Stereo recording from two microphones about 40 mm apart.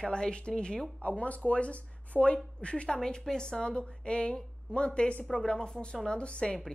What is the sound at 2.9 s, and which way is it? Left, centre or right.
Speech, centre.